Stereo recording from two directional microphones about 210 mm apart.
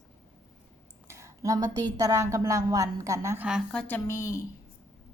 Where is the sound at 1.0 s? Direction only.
15° right (ahead or behind).